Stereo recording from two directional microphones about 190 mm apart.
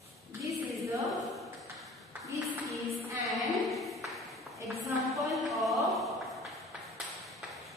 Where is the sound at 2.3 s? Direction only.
15° right (ahead or behind).